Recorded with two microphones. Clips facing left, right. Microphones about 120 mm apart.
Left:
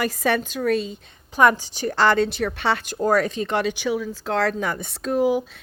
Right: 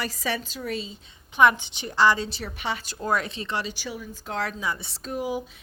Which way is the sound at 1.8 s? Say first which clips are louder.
Left 3 dB; 55° left (ahead or behind).